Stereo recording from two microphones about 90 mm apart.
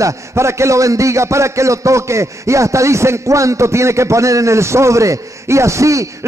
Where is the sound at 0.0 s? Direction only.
30° right (ahead or behind).